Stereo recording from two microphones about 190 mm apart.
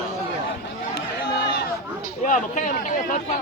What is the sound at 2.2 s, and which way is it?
Speech, 45° left (ahead or behind).